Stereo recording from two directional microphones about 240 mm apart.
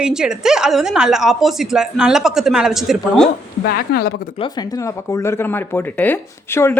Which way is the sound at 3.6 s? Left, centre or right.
Left.